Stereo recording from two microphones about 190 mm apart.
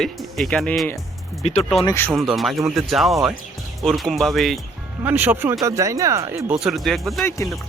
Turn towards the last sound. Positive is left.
turn(degrees=15)  # may be behind; listen again after turning